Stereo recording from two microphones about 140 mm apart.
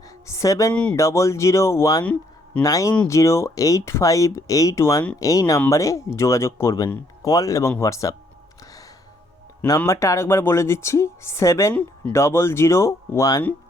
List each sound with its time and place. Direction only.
0.3 s speech: 20° left (ahead or behind)
0.7 s speech: 10° left (ahead or behind)
0.9 s speech: 20° left (ahead or behind)
9.6 s speech: 20° left (ahead or behind)
11.7 s speech: 10° left (ahead or behind)
12.1 s speech: 20° left (ahead or behind)